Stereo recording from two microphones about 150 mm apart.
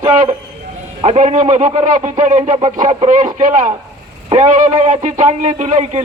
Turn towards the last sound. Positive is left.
turn(degrees=-50)  # may be behind; listen again after turning